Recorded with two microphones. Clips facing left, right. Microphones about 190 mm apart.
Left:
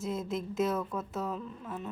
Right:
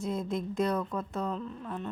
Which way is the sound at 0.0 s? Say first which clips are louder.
Right 2 dB; centre (ahead or behind).